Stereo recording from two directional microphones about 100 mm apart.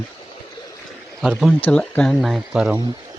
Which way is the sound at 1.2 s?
Centre (ahead or behind).